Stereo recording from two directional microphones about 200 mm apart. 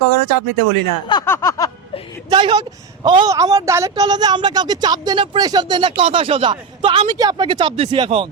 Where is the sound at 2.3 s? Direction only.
25° right (ahead or behind).